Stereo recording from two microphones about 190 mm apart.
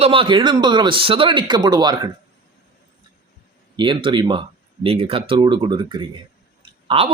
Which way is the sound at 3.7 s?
25° right (ahead or behind).